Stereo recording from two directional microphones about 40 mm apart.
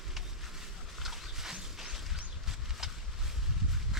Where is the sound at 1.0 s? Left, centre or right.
Centre.